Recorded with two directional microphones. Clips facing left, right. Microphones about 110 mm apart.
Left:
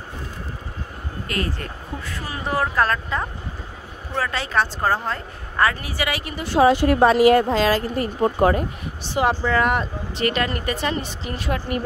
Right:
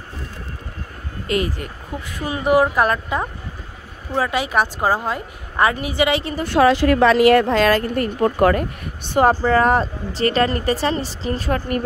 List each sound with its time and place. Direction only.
1.2 s a woman's voice: 20° right (ahead or behind)
6.4 s speech: 70° right (ahead or behind); by 11.8 s 40° right (ahead or behind)